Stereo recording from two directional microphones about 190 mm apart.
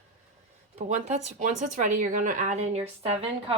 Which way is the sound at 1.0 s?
35° right (ahead or behind).